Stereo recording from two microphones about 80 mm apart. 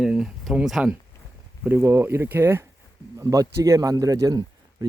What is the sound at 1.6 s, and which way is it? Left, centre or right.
Speech, right.